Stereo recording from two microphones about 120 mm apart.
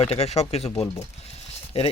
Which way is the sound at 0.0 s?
60° left (ahead or behind).